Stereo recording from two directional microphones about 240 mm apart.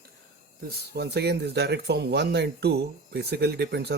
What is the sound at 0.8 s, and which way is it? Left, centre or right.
Speech, right.